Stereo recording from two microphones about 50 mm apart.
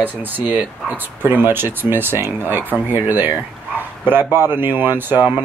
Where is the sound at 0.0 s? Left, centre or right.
Right.